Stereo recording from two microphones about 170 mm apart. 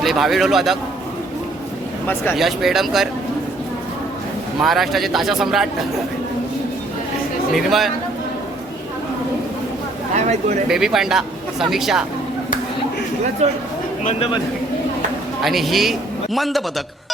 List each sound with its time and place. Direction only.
0.0 s speech: centre (ahead or behind)
2.3 s speech: centre (ahead or behind)
4.6 s speech: centre (ahead or behind)
7.5 s speech: centre (ahead or behind)
10.2 s speech: 45° right (ahead or behind)
10.7 s speech: 5° right (ahead or behind)
15.4 s a man's voice: centre (ahead or behind)